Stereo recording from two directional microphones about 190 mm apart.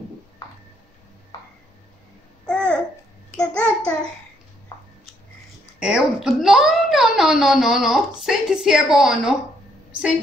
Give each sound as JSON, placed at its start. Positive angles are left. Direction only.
{"t": 2.4, "sound": "babbling", "side_deg": 5}
{"t": 3.3, "sound": "child singing", "side_deg": 5}
{"t": 5.8, "sound": "a child's voice", "side_deg": -5}